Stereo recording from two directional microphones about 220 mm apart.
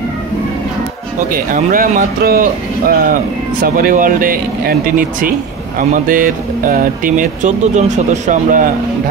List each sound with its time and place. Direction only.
1.3 s speech: 40° right (ahead or behind)